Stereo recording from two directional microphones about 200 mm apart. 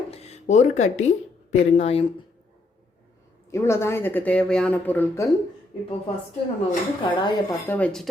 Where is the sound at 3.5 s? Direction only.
15° left (ahead or behind).